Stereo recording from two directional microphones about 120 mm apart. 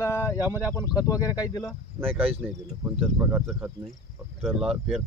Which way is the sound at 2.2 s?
50° right (ahead or behind).